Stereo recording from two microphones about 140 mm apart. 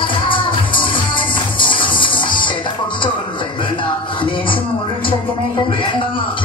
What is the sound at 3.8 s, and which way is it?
Music, 35° left (ahead or behind).